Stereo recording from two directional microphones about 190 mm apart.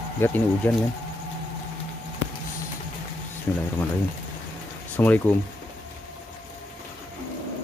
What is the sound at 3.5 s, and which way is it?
Speech, 10° left (ahead or behind).